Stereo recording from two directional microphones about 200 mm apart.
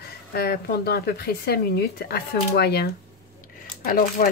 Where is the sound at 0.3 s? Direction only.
50° left (ahead or behind).